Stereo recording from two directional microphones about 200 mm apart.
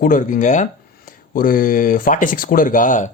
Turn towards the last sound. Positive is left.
turn(degrees=40)  # may be behind; listen again after turning